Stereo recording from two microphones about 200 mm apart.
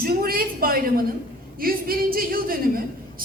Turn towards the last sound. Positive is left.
turn(degrees=-45)  # may be behind; listen again after turning